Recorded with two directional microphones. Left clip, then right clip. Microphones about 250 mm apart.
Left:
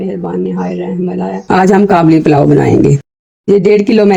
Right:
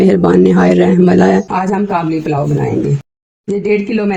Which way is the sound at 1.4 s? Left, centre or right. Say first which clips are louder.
Left 7 dB; left.